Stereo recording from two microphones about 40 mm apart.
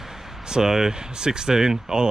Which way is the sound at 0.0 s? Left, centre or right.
Centre.